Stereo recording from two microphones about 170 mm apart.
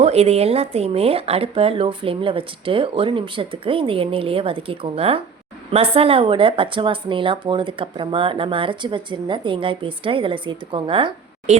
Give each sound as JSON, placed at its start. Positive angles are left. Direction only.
{"t": 0.0, "sound": "speech", "side_deg": -40}